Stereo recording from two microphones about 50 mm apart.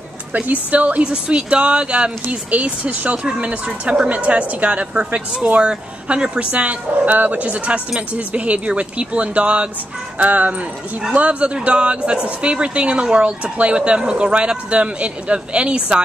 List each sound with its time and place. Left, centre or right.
0.3 s speech: right